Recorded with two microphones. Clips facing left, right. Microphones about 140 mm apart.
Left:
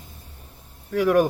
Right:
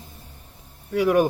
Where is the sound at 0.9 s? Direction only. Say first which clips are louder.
Even; 5° right (ahead or behind).